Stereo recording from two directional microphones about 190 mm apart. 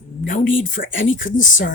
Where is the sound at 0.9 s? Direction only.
90° left.